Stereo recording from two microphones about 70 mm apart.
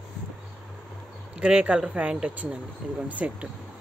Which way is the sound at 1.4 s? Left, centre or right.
Centre.